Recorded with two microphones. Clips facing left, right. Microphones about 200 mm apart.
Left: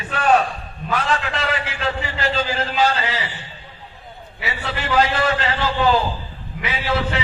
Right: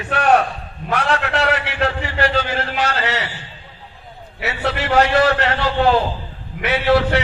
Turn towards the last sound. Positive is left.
turn(degrees=-70)  # may be behind; listen again after turning